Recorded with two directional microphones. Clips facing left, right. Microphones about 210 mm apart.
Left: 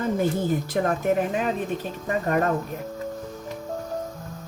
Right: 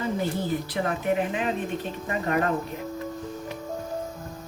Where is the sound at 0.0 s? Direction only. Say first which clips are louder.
Left 4 dB; 45° left (ahead or behind).